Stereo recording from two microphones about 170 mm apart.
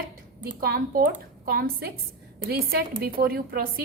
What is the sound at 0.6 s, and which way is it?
A woman's voice, 60° right (ahead or behind).